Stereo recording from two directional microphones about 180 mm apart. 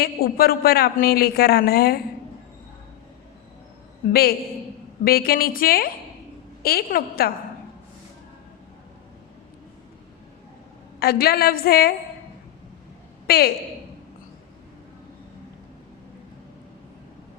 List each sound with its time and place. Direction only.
0.0 s a man's voice: 60° left (ahead or behind)
4.1 s a man's voice: 60° left (ahead or behind)
11.0 s a man's voice: 60° left (ahead or behind)
13.2 s a woman's voice: 60° left (ahead or behind)